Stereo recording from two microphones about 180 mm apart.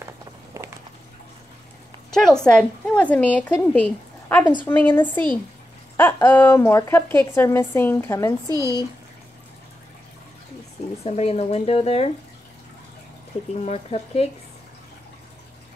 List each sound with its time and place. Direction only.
0.6 s a sound: 15° right (ahead or behind)
2.0 s a woman's voice: 5° left (ahead or behind)
8.5 s speech: 20° right (ahead or behind)
11.1 s speech: 35° left (ahead or behind)
13.6 s speech: 35° left (ahead or behind)